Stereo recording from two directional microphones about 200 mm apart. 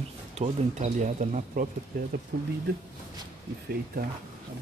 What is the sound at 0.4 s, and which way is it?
Speech, 30° right (ahead or behind).